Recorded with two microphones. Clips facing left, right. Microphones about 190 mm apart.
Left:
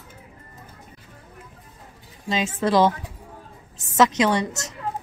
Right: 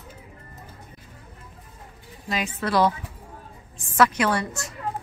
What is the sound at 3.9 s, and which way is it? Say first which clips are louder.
Speech: left 2 dB; 20° left (ahead or behind).